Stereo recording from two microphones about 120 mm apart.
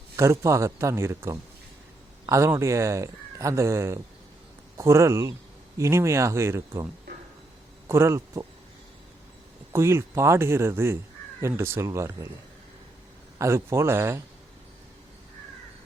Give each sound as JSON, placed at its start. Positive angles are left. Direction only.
{"t": 0.2, "sound": "a man's voice", "side_deg": -25}
{"t": 9.7, "sound": "speech", "side_deg": -20}
{"t": 13.4, "sound": "speech", "side_deg": -25}